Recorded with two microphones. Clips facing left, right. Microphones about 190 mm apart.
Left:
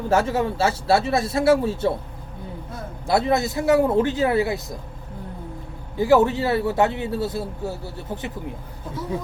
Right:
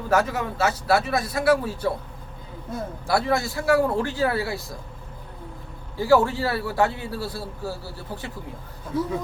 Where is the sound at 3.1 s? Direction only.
20° left (ahead or behind).